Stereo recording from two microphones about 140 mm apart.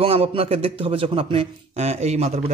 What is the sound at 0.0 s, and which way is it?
A man's voice, 40° right (ahead or behind).